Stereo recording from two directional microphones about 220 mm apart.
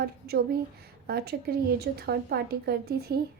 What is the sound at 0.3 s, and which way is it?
A woman's voice, 45° right (ahead or behind).